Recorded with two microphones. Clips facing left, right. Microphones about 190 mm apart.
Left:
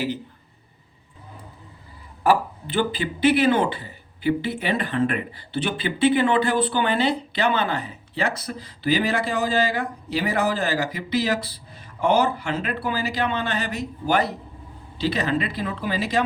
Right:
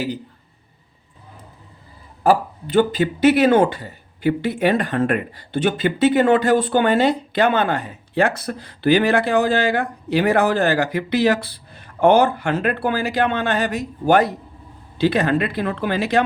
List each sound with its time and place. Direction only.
2.6 s speech: 45° right (ahead or behind); by 16.2 s 65° right (ahead or behind)